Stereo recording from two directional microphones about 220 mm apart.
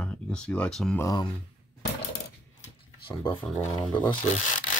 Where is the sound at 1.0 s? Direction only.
20° left (ahead or behind).